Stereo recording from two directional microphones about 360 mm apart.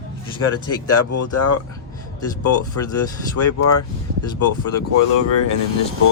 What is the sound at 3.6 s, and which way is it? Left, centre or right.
Speech, left.